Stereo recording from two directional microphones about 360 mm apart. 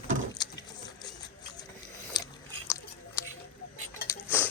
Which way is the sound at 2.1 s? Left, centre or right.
Centre.